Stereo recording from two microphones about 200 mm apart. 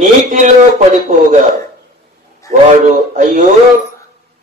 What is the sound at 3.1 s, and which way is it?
Speech, 40° right (ahead or behind).